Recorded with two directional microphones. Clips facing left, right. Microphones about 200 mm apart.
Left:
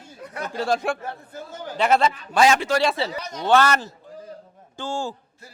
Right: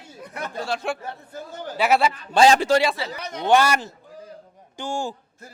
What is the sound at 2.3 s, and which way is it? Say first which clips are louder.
Speech: right 3 dB; 30° right (ahead or behind).